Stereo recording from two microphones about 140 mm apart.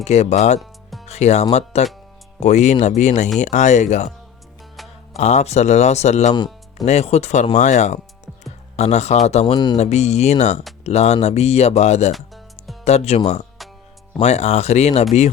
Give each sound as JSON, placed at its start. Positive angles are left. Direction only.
{"t": 0.0, "sound": "speech", "side_deg": 50}
{"t": 5.1, "sound": "speech", "side_deg": 50}
{"t": 9.5, "sound": "music", "side_deg": 30}
{"t": 9.7, "sound": "speech", "side_deg": 55}
{"t": 12.1, "sound": "music", "side_deg": 0}
{"t": 12.8, "sound": "speech", "side_deg": 50}